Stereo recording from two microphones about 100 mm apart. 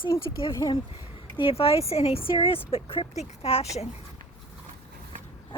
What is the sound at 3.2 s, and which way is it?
Speech, 85° left.